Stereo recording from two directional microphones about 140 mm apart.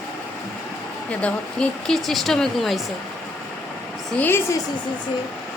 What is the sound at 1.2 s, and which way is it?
Speech, 5° left (ahead or behind).